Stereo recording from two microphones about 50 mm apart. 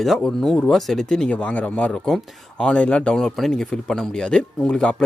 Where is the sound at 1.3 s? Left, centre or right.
Left.